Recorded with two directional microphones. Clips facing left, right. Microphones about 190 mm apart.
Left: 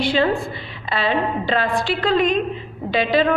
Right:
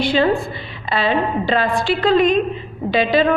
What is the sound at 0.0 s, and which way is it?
A woman's voice, 15° right (ahead or behind).